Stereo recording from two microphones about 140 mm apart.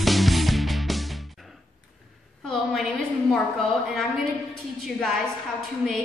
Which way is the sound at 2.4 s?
Centre (ahead or behind).